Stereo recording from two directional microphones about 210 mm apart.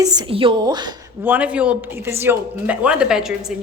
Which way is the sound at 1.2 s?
5° right (ahead or behind).